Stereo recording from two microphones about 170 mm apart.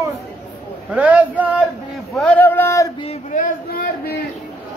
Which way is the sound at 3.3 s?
55° left (ahead or behind).